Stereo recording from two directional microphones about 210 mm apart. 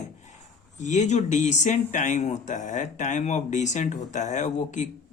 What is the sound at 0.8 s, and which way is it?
Speech, 35° left (ahead or behind).